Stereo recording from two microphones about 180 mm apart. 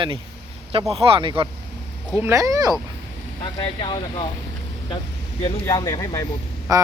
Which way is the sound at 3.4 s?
25° left (ahead or behind).